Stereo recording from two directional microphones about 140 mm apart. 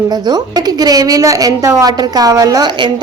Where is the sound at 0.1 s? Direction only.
30° right (ahead or behind).